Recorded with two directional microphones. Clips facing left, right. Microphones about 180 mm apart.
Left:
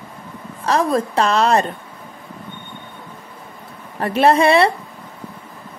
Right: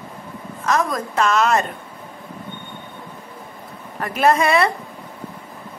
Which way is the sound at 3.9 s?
30° left (ahead or behind).